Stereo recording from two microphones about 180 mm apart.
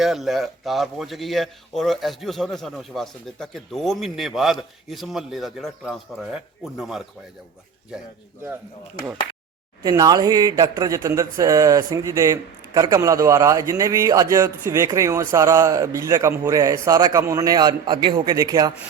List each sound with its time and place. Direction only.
0.0 s a man's voice: centre (ahead or behind)
9.8 s speech: 20° right (ahead or behind)